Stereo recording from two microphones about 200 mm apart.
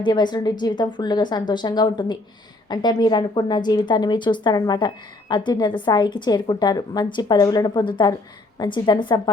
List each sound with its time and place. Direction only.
0.0 s a woman's voice: 20° left (ahead or behind)